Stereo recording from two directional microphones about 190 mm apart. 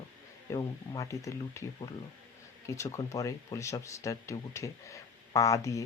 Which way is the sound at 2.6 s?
15° left (ahead or behind).